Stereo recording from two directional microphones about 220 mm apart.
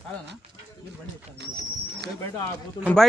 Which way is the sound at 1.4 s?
50° right (ahead or behind).